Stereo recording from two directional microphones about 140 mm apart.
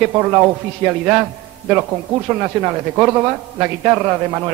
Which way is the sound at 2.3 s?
20° right (ahead or behind).